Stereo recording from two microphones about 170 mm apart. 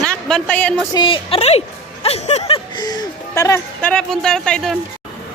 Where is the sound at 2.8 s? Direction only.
20° left (ahead or behind); by 4.8 s 5° left (ahead or behind).